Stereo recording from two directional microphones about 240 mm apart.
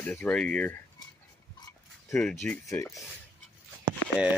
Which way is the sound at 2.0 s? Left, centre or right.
Centre.